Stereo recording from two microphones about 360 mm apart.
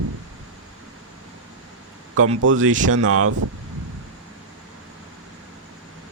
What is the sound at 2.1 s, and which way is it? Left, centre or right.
Speech, right.